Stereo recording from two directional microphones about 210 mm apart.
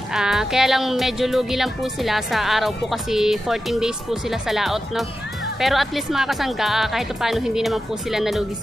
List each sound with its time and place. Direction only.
0.1 s speech: centre (ahead or behind)